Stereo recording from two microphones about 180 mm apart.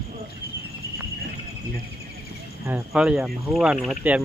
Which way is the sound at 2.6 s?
5° right (ahead or behind).